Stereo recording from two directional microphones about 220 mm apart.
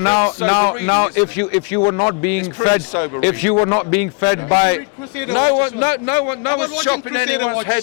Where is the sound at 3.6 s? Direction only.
25° left (ahead or behind).